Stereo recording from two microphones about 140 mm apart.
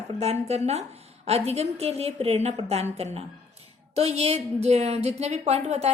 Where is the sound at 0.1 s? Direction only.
50° right (ahead or behind).